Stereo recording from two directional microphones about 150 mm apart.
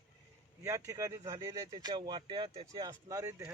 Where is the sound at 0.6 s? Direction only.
20° right (ahead or behind); by 2.7 s 35° right (ahead or behind).